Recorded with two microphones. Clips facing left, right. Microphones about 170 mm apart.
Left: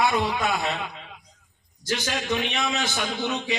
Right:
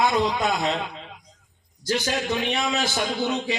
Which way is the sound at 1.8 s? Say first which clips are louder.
Right 2 dB; 35° right (ahead or behind).